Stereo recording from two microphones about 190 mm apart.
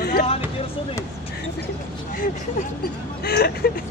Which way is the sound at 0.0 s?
55° left (ahead or behind).